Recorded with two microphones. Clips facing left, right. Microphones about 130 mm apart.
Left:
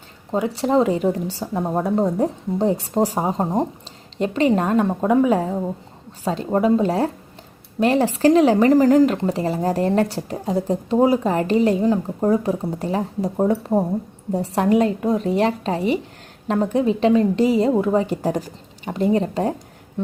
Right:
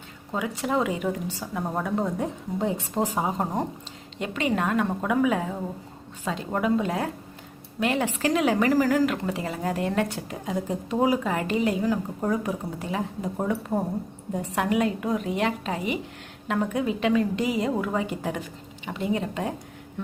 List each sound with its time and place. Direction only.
0.3 s a woman's voice: 30° left (ahead or behind)